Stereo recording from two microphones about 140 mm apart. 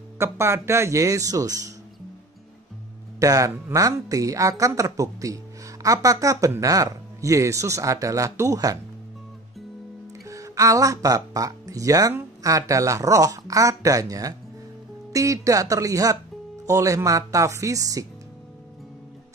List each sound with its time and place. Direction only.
0.2 s speech: 20° right (ahead or behind)
3.2 s speech: 25° right (ahead or behind)
10.2 s speech: 25° right (ahead or behind)